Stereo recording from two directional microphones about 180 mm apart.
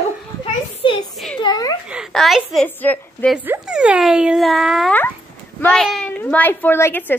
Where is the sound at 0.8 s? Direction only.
30° left (ahead or behind).